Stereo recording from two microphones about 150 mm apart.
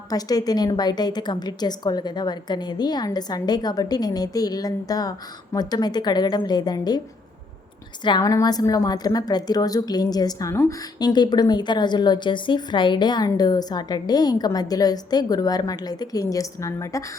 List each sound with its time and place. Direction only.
0.1 s a woman's voice: 25° left (ahead or behind)
8.0 s a woman's voice: 25° left (ahead or behind)